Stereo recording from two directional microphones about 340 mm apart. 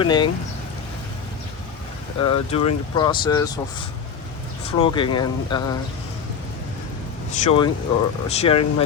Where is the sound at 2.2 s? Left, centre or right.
Centre.